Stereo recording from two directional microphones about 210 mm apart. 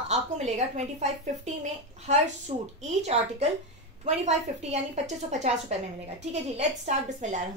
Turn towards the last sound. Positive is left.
turn(degrees=-35)  # may be behind; listen again after turning